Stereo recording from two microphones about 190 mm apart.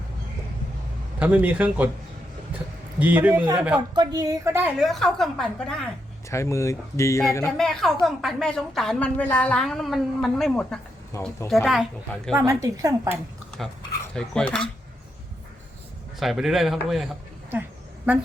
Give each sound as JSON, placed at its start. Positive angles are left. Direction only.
{"t": 1.2, "sound": "speech", "side_deg": -10}
{"t": 3.0, "sound": "a woman's voice", "side_deg": -10}
{"t": 4.8, "sound": "a woman's voice", "side_deg": 0}
{"t": 6.3, "sound": "speech", "side_deg": 15}
{"t": 7.5, "sound": "a woman's voice", "side_deg": 0}
{"t": 14.1, "sound": "a woman's voice", "side_deg": 5}
{"t": 16.2, "sound": "a woman's voice", "side_deg": 0}